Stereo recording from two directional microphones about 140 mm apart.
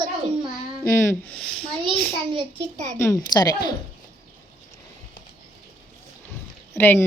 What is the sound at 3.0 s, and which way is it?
Speech, 25° left (ahead or behind).